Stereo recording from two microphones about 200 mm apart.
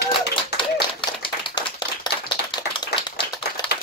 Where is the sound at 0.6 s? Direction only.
25° left (ahead or behind).